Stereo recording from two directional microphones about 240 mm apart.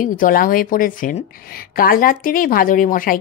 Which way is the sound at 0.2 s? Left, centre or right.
Left.